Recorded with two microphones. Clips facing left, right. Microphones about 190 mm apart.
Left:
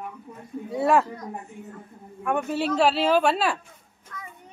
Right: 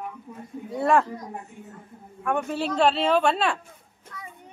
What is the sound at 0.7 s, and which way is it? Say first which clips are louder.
Speech: even; 5° left (ahead or behind).